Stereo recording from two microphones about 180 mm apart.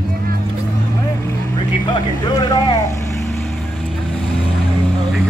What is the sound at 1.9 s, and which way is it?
Speech, 20° left (ahead or behind).